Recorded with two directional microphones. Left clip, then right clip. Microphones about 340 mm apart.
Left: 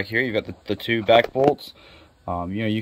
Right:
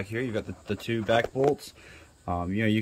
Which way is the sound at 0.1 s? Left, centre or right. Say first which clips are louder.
Left 9 dB; centre.